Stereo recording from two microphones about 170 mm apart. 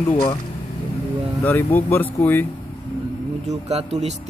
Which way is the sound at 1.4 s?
10° left (ahead or behind).